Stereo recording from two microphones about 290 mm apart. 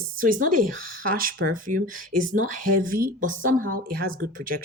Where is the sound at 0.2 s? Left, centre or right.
Right.